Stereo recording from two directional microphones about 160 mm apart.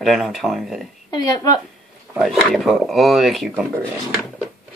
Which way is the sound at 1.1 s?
25° left (ahead or behind).